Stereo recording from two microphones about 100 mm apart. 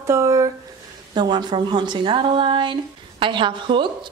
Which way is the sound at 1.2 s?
45° right (ahead or behind).